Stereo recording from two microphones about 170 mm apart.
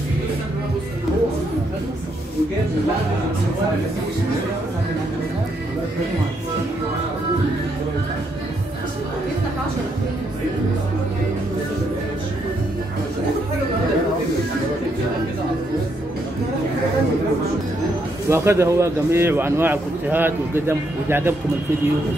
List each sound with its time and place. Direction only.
18.3 s speech: 15° right (ahead or behind)